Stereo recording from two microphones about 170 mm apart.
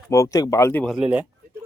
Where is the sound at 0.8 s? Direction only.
5° right (ahead or behind).